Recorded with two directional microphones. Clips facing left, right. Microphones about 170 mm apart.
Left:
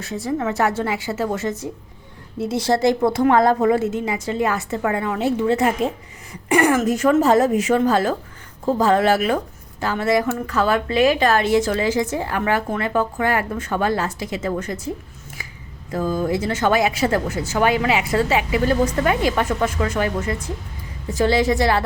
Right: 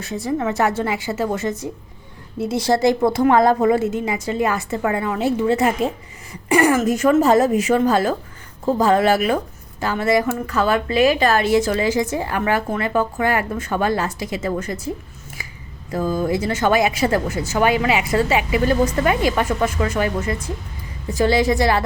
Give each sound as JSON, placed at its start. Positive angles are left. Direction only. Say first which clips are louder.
{"t": 0.0, "sound": "speech", "louder": "right 1 dB", "side_deg": -20}
{"t": 2.6, "sound": "speech", "louder": "right 1 dB", "side_deg": -15}
{"t": 15.4, "sound": "finger snapping", "louder": "right 1 dB", "side_deg": -10}
{"t": 15.9, "sound": "speech", "louder": "right 1 dB", "side_deg": -10}